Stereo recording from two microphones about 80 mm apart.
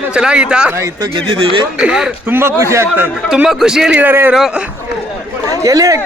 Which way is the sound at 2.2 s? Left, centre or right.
Right.